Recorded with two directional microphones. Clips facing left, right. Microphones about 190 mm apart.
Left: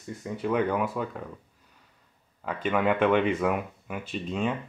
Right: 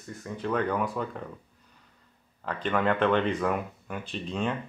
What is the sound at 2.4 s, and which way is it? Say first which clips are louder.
Speech: left 1 dB; 5° left (ahead or behind).